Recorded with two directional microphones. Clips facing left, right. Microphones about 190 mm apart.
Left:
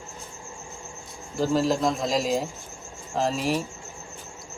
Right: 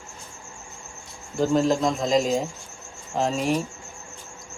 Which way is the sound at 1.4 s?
Centre (ahead or behind).